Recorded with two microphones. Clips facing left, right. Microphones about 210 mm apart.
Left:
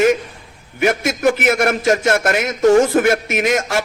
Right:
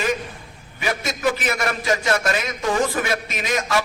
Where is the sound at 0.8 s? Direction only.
65° left (ahead or behind).